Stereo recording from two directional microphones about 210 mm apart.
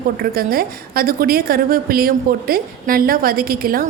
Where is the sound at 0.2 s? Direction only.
45° right (ahead or behind).